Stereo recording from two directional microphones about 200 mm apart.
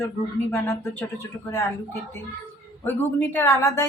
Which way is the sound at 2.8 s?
10° left (ahead or behind).